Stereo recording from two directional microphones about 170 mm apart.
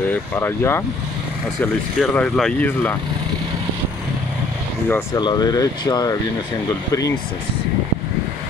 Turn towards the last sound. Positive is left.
turn(degrees=20)  # may be behind; listen again after turning